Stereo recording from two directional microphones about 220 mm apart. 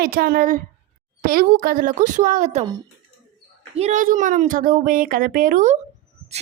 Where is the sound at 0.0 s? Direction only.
45° right (ahead or behind).